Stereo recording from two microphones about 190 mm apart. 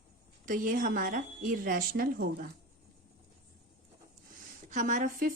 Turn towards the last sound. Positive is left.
turn(degrees=-45)  # may be behind; listen again after turning